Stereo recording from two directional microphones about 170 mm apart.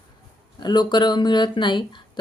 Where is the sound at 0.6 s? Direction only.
25° left (ahead or behind).